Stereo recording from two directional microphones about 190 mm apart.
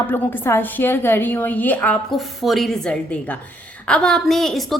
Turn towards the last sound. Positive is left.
turn(degrees=0)  # may be behind; listen again after turning